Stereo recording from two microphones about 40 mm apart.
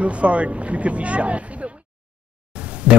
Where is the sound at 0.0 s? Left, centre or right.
Right.